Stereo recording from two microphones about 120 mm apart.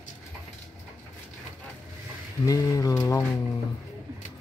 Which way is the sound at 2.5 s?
30° left (ahead or behind).